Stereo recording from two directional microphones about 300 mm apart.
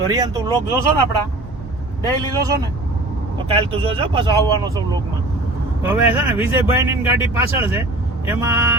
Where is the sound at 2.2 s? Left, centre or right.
Centre.